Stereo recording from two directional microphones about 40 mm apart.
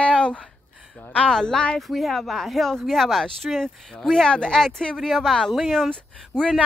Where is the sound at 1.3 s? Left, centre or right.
Centre.